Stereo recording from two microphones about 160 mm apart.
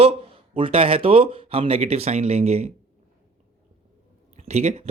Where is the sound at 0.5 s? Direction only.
35° right (ahead or behind).